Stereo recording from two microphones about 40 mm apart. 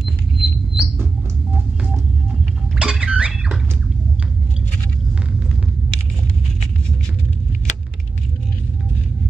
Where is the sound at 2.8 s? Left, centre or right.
Right.